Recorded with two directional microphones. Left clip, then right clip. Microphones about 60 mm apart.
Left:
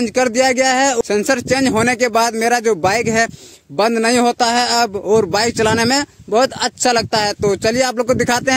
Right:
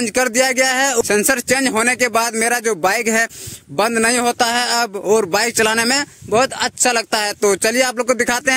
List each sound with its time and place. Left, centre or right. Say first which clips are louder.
0.0 s speech: left 2 dB; centre
1.6 s speech: left 1 dB; left
2.6 s a man's voice: left 2 dB; centre; by 6.0 s left
6.3 s speech: left 1 dB; left
7.0 s speech: left 1 dB; left
7.7 s speech: left 1 dB; left